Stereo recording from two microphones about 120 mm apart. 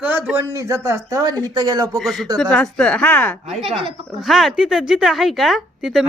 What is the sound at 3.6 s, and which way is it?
Speech, 50° right (ahead or behind).